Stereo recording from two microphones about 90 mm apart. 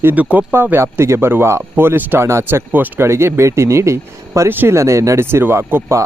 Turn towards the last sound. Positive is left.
turn(degrees=-30)  # may be behind; listen again after turning